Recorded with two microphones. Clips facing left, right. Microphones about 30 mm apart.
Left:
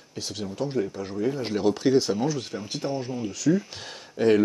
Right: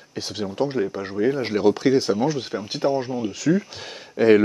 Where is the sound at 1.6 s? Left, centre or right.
Centre.